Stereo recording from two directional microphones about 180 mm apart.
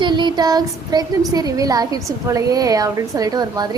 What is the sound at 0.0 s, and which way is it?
A woman's voice, 25° right (ahead or behind).